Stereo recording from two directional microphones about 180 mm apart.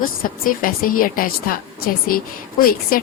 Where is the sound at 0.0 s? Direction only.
50° left (ahead or behind).